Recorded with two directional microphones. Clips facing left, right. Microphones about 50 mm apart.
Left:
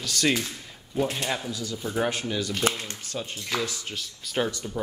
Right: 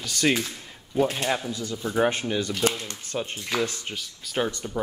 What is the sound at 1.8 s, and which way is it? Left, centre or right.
Speech, centre.